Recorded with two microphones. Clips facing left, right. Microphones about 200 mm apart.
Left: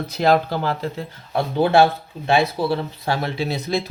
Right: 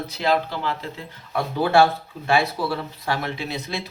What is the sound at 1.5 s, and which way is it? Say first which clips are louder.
Speech: left 2 dB; 20° left (ahead or behind).